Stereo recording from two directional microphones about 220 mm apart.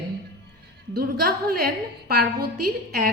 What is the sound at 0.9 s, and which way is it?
A woman's voice, 45° right (ahead or behind).